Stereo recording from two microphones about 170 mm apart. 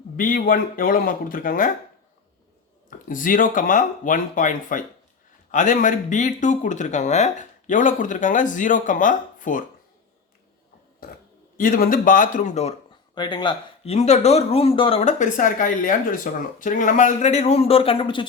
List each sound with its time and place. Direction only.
0.2 s speech: 55° left (ahead or behind)
3.1 s speech: 50° left (ahead or behind)
11.5 s speech: 55° left (ahead or behind)
13.1 s speech: 25° left (ahead or behind)
15.0 s speech: 50° left (ahead or behind); by 18.3 s 30° left (ahead or behind)